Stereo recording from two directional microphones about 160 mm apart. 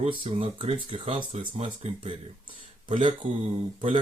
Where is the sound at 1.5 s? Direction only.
40° right (ahead or behind).